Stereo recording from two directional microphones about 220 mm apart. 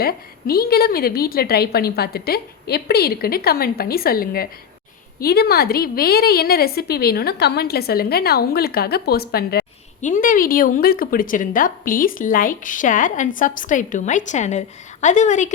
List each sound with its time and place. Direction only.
0.0 s a woman's voice: 45° left (ahead or behind)